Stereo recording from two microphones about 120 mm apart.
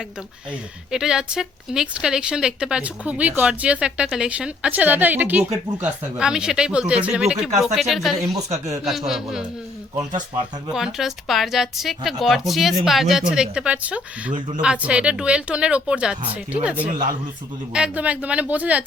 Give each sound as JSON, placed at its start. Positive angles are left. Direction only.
{"t": 0.9, "sound": "a woman's voice", "side_deg": -5}
{"t": 8.4, "sound": "speech", "side_deg": -65}
{"t": 8.8, "sound": "speech", "side_deg": -5}
{"t": 10.8, "sound": "a woman's voice", "side_deg": -5}
{"t": 17.7, "sound": "a woman's voice", "side_deg": -10}